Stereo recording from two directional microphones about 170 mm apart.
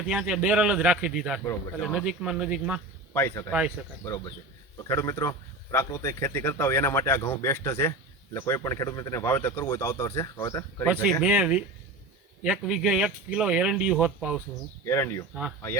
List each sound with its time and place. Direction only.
0.1 s speech: 5° right (ahead or behind)
3.1 s speech: 15° left (ahead or behind)
4.8 s speech: 15° left (ahead or behind)
10.9 s speech: centre (ahead or behind)
11.3 s speech: 10° right (ahead or behind)
14.8 s speech: 15° left (ahead or behind)